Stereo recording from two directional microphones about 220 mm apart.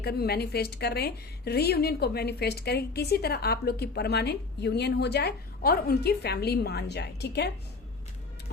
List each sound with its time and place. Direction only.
0.0 s a woman's voice: 45° left (ahead or behind)